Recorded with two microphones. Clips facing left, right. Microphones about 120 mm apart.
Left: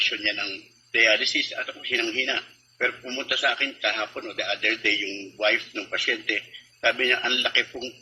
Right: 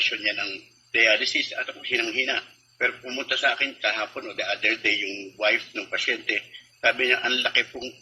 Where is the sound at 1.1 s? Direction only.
20° left (ahead or behind).